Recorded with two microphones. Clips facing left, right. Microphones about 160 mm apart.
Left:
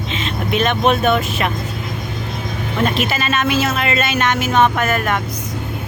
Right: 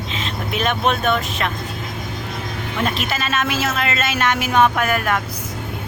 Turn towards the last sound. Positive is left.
turn(degrees=-5)  # may be behind; listen again after turning